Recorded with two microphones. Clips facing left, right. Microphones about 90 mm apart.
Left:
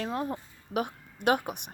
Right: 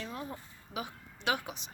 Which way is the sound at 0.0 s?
60° left (ahead or behind).